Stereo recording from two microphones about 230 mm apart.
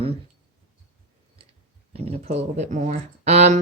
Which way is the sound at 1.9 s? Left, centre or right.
Right.